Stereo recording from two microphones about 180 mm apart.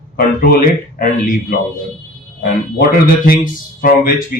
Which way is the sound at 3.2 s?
55° left (ahead or behind).